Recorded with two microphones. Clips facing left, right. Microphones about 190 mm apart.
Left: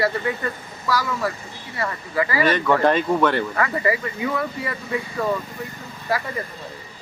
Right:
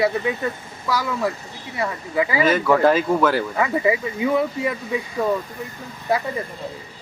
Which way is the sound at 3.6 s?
20° right (ahead or behind).